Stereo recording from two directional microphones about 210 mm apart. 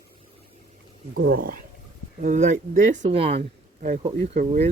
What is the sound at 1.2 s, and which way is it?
Speech, 45° right (ahead or behind).